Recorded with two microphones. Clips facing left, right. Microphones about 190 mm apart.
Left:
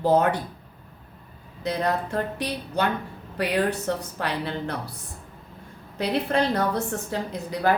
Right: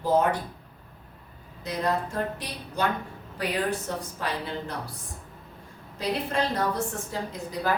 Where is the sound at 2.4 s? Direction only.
65° left (ahead or behind).